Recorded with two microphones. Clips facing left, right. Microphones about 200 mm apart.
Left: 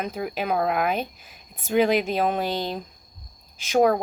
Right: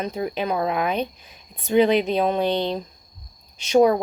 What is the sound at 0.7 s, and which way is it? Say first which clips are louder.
Speech: right 1 dB; 5° left (ahead or behind).